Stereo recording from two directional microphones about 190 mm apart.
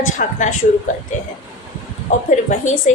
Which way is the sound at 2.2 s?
40° left (ahead or behind).